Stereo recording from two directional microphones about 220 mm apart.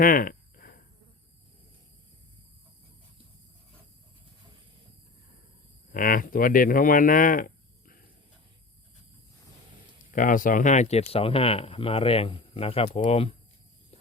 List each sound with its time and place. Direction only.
0.0 s a sound: 40° left (ahead or behind)
5.9 s speech: 40° left (ahead or behind)
10.1 s speech: 40° left (ahead or behind)